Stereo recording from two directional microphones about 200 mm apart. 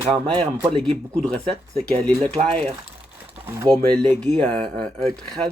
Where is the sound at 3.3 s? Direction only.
10° right (ahead or behind).